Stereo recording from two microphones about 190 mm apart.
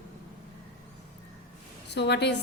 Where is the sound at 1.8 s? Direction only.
65° left (ahead or behind).